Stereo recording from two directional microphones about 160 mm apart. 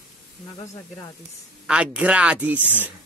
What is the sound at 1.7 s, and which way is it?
Speech, 5° right (ahead or behind).